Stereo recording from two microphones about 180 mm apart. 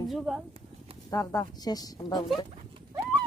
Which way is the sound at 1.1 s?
20° left (ahead or behind).